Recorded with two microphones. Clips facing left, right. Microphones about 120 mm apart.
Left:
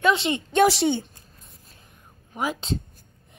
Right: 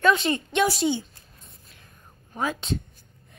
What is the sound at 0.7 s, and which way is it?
Speech, 65° left (ahead or behind).